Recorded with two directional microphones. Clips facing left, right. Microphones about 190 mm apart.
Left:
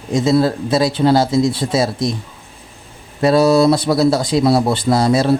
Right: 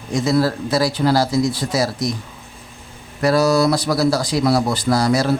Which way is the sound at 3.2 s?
25° left (ahead or behind).